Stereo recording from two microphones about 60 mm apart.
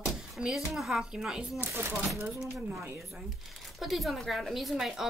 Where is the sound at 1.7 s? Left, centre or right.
Right.